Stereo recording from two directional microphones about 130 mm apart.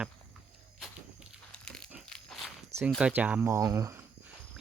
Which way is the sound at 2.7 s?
55° right (ahead or behind).